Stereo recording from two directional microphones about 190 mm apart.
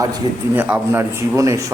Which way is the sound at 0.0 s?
15° right (ahead or behind).